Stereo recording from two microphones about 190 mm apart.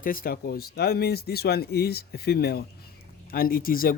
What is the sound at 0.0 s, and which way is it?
Speech, 50° left (ahead or behind).